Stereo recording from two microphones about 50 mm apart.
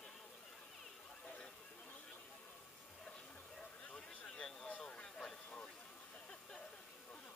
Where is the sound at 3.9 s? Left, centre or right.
Centre.